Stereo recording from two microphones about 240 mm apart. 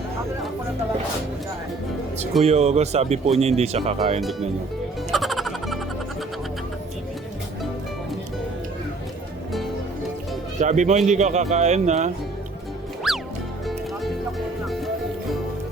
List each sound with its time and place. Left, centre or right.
2.4 s speech: right
4.2 s speech: centre
5.1 s music: centre
10.6 s speech: right
13.1 s music: centre